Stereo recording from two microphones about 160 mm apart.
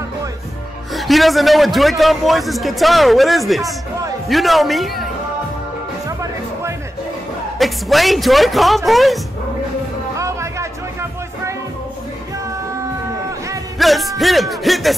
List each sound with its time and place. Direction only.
0.9 s a man's voice: centre (ahead or behind)
7.5 s a man's voice: centre (ahead or behind)
10.1 s music: 20° right (ahead or behind)
13.7 s a man's voice: centre (ahead or behind)